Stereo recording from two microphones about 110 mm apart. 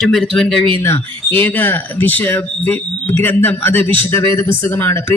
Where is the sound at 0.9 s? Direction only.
20° left (ahead or behind).